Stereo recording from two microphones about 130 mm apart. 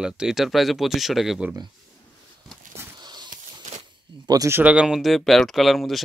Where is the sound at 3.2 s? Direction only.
65° right (ahead or behind).